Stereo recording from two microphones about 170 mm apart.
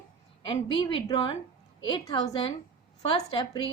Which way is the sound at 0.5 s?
30° left (ahead or behind).